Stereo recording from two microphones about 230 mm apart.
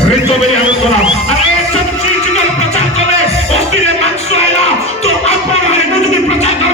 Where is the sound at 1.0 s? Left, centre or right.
Left.